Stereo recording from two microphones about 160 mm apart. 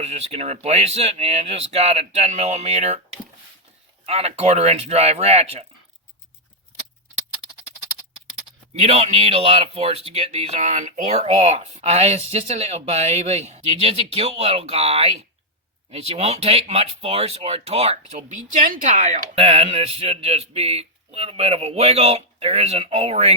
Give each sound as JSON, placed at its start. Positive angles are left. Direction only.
{"t": 0.0, "sound": "speech", "side_deg": -40}
{"t": 4.0, "sound": "speech", "side_deg": -40}
{"t": 8.8, "sound": "speech", "side_deg": -40}